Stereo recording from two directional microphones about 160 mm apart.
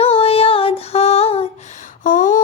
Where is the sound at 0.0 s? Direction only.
40° left (ahead or behind).